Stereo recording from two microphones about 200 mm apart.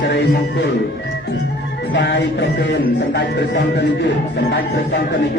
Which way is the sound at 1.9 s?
60° left (ahead or behind).